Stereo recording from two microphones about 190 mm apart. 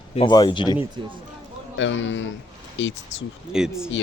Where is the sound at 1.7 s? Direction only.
75° left (ahead or behind).